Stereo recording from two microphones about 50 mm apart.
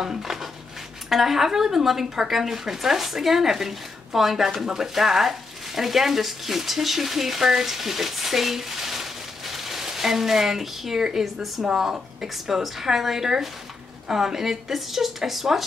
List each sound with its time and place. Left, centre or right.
0.0 s dishes: centre
1.1 s a woman's voice: centre
11.6 s a woman's voice: centre